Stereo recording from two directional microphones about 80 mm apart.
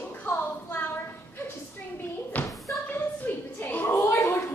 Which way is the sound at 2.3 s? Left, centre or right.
Centre.